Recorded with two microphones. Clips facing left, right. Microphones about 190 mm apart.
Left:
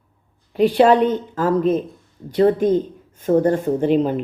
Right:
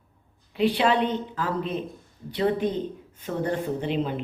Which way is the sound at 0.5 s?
45° left (ahead or behind).